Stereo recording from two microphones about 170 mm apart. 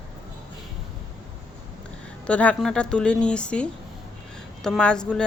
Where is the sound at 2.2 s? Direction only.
5° left (ahead or behind).